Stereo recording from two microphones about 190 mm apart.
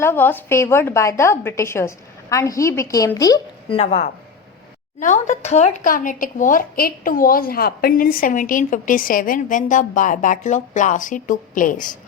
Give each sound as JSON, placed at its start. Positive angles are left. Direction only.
{"t": 0.0, "sound": "a woman's voice", "side_deg": 10}
{"t": 3.8, "sound": "speech", "side_deg": 35}